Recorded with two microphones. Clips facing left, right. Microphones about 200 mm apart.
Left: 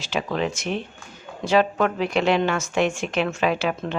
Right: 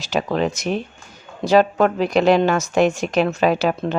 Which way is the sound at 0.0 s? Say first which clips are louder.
Right 4 dB; 40° right (ahead or behind).